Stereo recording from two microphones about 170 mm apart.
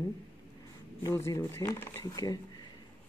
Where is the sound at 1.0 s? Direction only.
20° left (ahead or behind).